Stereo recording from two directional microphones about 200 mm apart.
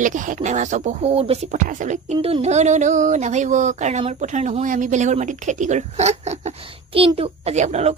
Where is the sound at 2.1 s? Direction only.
25° right (ahead or behind).